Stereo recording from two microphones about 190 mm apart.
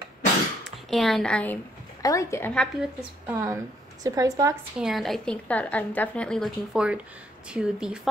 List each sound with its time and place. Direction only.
0.8 s a woman's voice: centre (ahead or behind)
3.3 s a woman's voice: 15° right (ahead or behind)
4.7 s a woman's voice: centre (ahead or behind)